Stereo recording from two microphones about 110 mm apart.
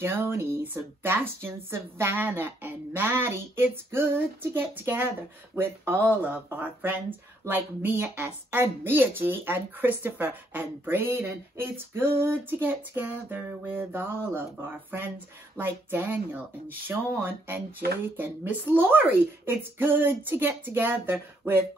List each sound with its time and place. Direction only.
0.0 s speech: 20° right (ahead or behind)
15.5 s speech: 20° right (ahead or behind)